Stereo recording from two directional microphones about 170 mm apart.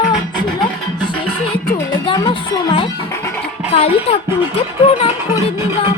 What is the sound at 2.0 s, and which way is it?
Speech, 25° left (ahead or behind).